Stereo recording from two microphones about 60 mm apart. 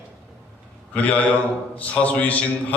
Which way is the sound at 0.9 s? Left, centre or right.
Left.